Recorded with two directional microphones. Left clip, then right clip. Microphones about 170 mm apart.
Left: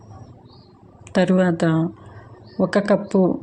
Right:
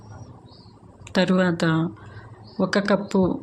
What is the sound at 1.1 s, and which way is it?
Speech, 20° left (ahead or behind).